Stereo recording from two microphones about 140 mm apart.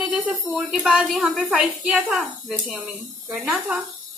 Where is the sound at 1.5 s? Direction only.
10° right (ahead or behind).